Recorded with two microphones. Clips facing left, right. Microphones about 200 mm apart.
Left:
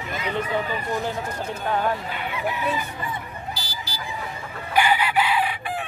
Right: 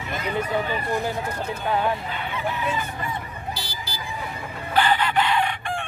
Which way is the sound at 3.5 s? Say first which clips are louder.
Right 1 dB; 60° right (ahead or behind).